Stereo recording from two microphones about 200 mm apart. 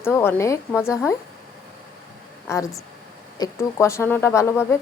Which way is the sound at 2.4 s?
15° left (ahead or behind).